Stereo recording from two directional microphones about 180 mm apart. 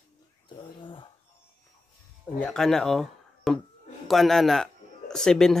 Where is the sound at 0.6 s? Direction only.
30° left (ahead or behind).